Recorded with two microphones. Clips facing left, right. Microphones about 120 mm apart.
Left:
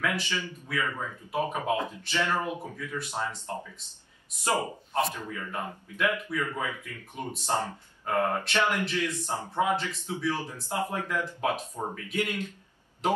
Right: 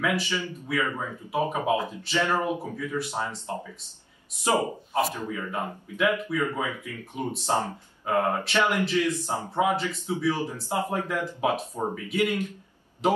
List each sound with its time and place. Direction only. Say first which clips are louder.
0.3 s speech: right 4 dB; 15° right (ahead or behind)